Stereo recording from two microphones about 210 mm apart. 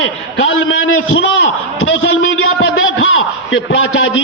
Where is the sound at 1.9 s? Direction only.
75° left (ahead or behind).